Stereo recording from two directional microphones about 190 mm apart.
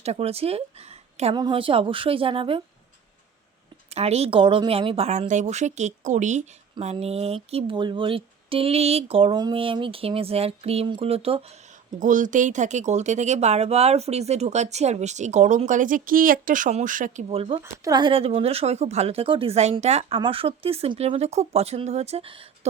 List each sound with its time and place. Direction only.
0.0 s a woman's voice: 35° right (ahead or behind)
3.9 s a woman's voice: 35° right (ahead or behind)
11.9 s a woman's voice: 45° right (ahead or behind)
17.2 s a woman's voice: 30° right (ahead or behind)